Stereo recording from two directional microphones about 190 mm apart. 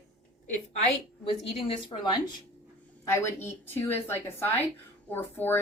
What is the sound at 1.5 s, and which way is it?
Speech, 30° left (ahead or behind).